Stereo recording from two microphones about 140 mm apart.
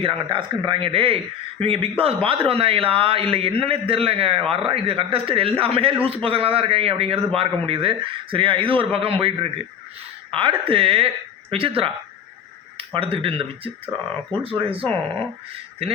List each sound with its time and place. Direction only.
0.0 s a man's voice: 40° right (ahead or behind)
14.3 s speech: 40° right (ahead or behind)